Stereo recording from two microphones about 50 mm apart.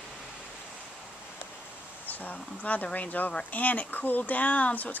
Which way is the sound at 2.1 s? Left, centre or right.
Left.